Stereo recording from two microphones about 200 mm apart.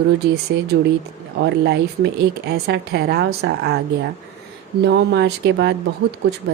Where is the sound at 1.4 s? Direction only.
55° right (ahead or behind).